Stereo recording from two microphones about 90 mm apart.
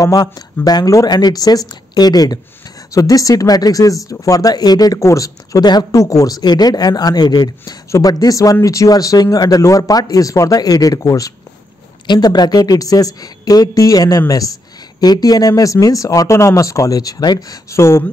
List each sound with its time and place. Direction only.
0.0 s speech: 45° left (ahead or behind)
12.1 s speech: 50° left (ahead or behind)
17.6 s speech: 30° left (ahead or behind)